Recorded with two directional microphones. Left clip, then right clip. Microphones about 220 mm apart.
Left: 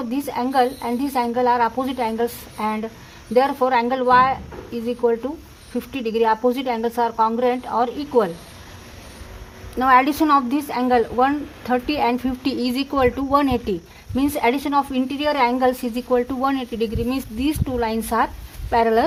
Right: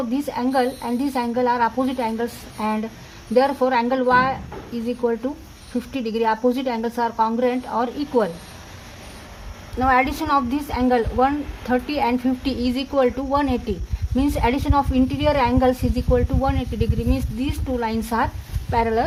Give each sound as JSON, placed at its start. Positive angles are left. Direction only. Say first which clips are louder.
{"t": 0.1, "sound": "a woman's voice", "louder": "left 4 dB", "side_deg": 35}
{"t": 9.7, "sound": "a woman's voice", "louder": "left 3 dB", "side_deg": 40}
{"t": 18.7, "sound": "speech", "louder": "left 3 dB", "side_deg": 45}